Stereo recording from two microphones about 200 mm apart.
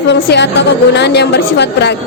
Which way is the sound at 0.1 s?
60° left (ahead or behind).